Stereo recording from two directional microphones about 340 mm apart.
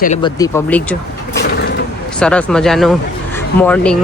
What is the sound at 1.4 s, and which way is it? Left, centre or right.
Vehicle, left.